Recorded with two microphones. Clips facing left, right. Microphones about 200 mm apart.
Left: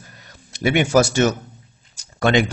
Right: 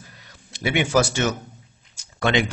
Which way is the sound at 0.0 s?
45° left (ahead or behind).